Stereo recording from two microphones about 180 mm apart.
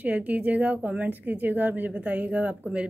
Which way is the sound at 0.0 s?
10° right (ahead or behind).